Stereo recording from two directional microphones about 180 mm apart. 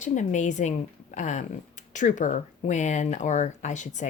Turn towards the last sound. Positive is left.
turn(degrees=40)  # may be behind; listen again after turning